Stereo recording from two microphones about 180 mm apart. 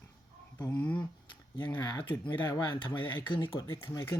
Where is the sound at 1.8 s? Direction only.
25° left (ahead or behind).